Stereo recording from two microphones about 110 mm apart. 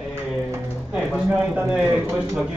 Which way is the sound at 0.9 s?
10° right (ahead or behind).